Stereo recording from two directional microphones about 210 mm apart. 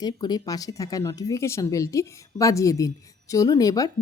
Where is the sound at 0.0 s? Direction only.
20° left (ahead or behind).